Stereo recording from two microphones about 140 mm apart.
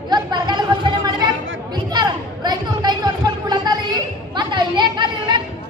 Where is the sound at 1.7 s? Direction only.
30° right (ahead or behind).